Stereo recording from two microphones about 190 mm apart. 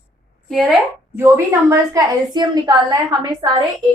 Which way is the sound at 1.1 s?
15° right (ahead or behind).